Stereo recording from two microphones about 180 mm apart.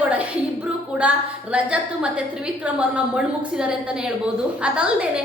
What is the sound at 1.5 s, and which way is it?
A woman's voice, 5° right (ahead or behind).